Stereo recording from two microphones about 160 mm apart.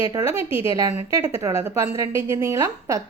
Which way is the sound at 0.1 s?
25° right (ahead or behind).